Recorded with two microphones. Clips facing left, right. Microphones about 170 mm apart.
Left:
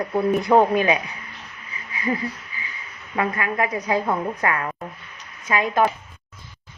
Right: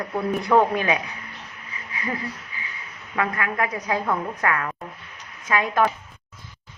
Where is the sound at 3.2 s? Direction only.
20° left (ahead or behind).